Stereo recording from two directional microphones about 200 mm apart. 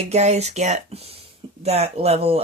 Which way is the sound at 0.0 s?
35° right (ahead or behind).